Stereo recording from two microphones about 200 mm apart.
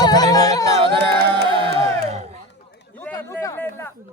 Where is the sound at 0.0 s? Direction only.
20° left (ahead or behind).